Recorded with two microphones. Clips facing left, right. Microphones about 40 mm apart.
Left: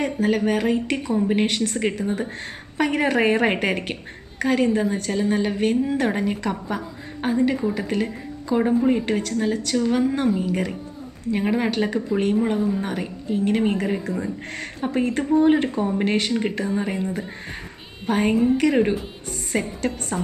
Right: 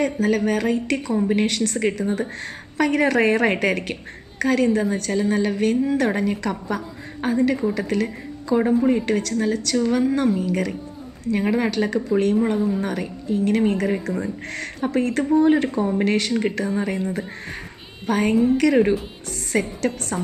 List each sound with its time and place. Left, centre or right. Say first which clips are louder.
0.0 s speech: right 1 dB; centre
2.0 s speech: right 1 dB; centre
2.3 s speech: right 2 dB; centre
10.3 s speech: right 1 dB; centre
12.5 s speech: right 1 dB; centre
12.8 s speech: right 2 dB; centre
16.3 s speech: right 1 dB; centre
18.0 s speech: right 1 dB; centre
19.5 s speech: right 2 dB; centre